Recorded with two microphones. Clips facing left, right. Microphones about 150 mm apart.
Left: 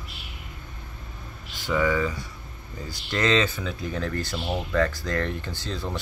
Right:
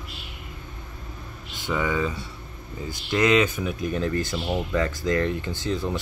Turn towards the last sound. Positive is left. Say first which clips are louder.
# right 5 dB
turn(degrees=-20)  # may be behind; listen again after turning